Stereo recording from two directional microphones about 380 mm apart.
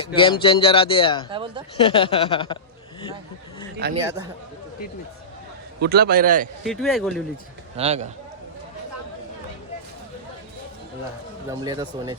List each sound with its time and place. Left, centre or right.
0.0 s speech: centre
1.3 s speech: centre
1.8 s speech: centre
3.8 s a man's voice: right
5.8 s a man's voice: right
6.7 s speech: centre
7.8 s speech: centre
11.4 s speech: centre